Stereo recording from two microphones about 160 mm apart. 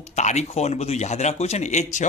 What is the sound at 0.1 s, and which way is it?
A man's voice, 45° left (ahead or behind).